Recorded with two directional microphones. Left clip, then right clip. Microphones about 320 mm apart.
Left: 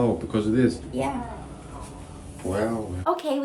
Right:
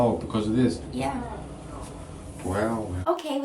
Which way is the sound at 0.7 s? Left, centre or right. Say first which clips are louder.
Left 2 dB; centre.